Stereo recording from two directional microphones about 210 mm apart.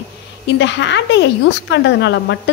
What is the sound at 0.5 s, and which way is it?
A woman's voice, 60° left (ahead or behind).